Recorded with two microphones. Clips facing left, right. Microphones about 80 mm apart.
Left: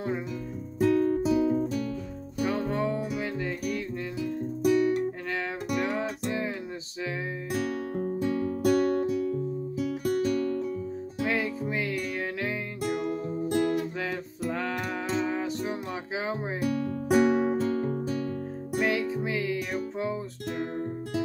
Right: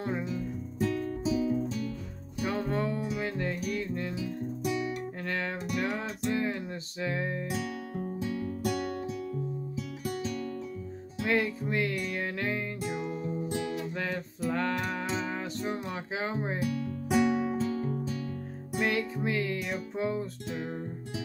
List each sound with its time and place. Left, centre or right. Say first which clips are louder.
0.7 s music: left 9 dB; left
2.4 s music: left 3 dB; centre
4.2 s guitar: left 5 dB; left
5.8 s music: left 3 dB; centre
8.2 s music: left 6 dB; left
11.2 s music: right 1 dB; centre
12.9 s music: left 5 dB; left
14.5 s music: right 1 dB; centre
16.5 s music: left 4 dB; left
18.8 s music: left 3 dB; centre